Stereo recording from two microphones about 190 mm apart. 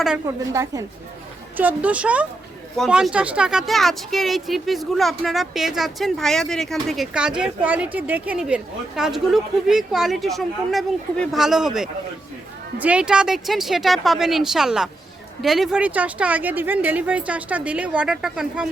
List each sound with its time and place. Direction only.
0.3 s a woman's voice: 15° right (ahead or behind)